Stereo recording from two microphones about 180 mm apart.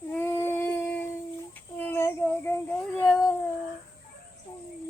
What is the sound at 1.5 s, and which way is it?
Child singing, 10° left (ahead or behind).